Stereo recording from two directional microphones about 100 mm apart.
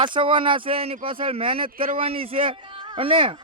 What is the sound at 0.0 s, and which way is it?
Speech, 60° right (ahead or behind).